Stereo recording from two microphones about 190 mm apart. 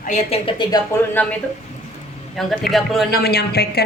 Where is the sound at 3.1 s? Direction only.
55° left (ahead or behind).